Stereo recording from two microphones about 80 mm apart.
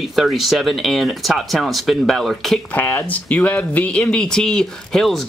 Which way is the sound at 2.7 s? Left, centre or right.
Left.